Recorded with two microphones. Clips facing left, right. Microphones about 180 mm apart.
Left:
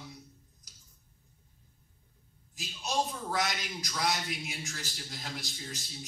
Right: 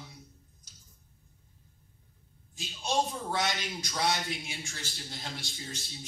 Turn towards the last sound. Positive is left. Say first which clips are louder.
# even
turn(degrees=-30)  # may be behind; listen again after turning